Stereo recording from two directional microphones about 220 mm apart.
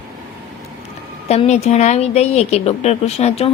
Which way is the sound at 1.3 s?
30° left (ahead or behind).